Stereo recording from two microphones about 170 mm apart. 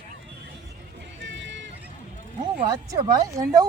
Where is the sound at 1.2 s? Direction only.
90° right.